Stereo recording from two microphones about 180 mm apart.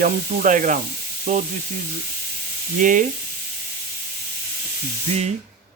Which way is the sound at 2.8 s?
45° right (ahead or behind).